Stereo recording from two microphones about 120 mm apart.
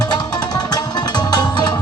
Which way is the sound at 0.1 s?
35° left (ahead or behind).